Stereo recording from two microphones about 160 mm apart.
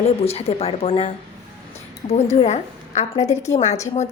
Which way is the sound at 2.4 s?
45° left (ahead or behind).